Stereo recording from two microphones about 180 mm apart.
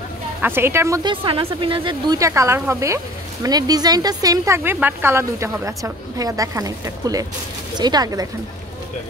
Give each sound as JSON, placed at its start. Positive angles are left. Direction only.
{"t": 0.4, "sound": "a woman's voice", "side_deg": -15}